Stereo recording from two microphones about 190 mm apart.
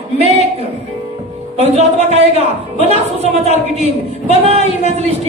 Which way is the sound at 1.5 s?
35° right (ahead or behind).